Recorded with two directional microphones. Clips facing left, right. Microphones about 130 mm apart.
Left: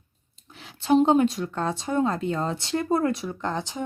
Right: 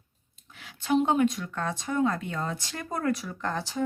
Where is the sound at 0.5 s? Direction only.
30° left (ahead or behind).